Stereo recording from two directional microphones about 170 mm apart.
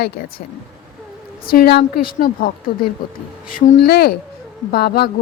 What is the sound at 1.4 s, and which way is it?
Speech, 60° left (ahead or behind).